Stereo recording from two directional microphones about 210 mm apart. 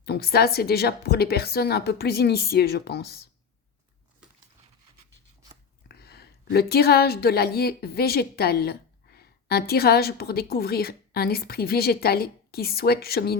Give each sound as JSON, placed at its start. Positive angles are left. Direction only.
{"t": 0.0, "sound": "a woman's voice", "side_deg": 50}
{"t": 5.9, "sound": "speech", "side_deg": 50}